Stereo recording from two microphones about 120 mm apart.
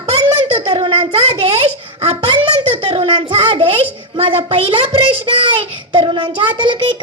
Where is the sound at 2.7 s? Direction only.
50° right (ahead or behind).